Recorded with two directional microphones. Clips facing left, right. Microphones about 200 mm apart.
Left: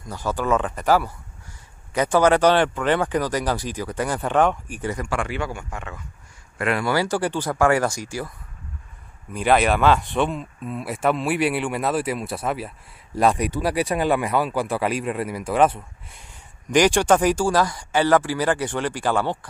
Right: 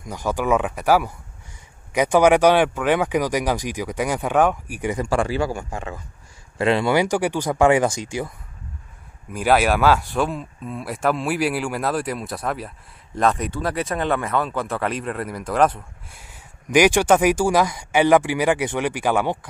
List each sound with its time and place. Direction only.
0.0 s speech: 15° right (ahead or behind)
4.9 s speech: 30° right (ahead or behind)
9.3 s speech: 5° right (ahead or behind)